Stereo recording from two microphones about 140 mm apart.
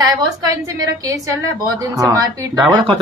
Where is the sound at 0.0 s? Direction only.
25° right (ahead or behind).